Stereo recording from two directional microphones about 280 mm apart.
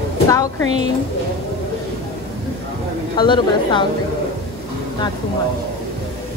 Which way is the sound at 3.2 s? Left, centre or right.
Centre.